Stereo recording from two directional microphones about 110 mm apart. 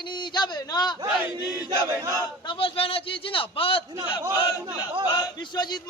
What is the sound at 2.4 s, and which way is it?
A man's voice, 50° left (ahead or behind).